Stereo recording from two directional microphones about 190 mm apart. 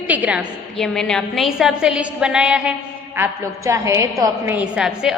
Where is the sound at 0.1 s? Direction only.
5° right (ahead or behind).